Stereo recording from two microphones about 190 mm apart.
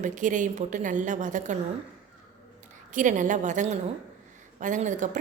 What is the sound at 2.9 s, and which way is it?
A woman's voice, 40° right (ahead or behind).